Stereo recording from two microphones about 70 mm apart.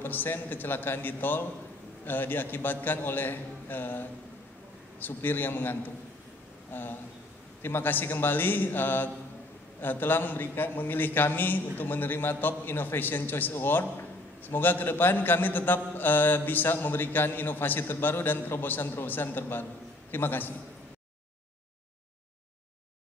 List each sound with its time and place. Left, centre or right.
0.0 s a man's voice: left